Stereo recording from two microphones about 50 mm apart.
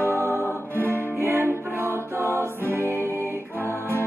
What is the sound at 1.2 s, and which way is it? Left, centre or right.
Music, right.